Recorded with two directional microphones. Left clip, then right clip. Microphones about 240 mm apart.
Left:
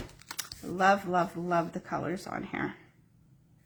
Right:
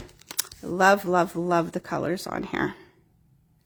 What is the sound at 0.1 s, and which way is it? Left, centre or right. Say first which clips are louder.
Typing: right 2 dB; centre.